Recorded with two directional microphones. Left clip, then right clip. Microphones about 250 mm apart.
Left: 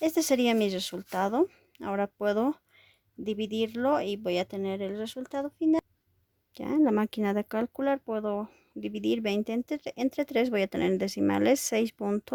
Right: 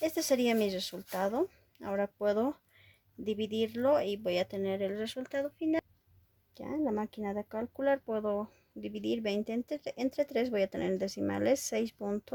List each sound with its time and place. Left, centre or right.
0.0 s speech: left